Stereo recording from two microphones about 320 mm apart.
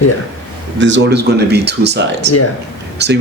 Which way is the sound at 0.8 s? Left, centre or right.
Right.